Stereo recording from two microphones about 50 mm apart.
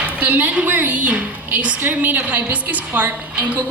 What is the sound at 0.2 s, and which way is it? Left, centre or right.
A woman's voice, right.